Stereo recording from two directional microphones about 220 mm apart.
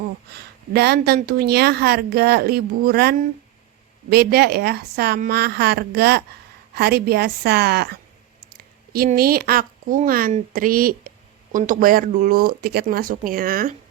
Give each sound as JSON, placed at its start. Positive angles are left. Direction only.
{"t": 0.3, "sound": "a woman's voice", "side_deg": -45}